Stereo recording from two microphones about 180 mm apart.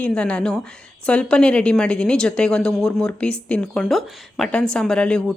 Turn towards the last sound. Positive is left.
turn(degrees=5)  # may be behind; listen again after turning